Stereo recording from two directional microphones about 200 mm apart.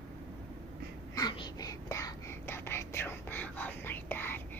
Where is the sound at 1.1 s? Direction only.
20° left (ahead or behind).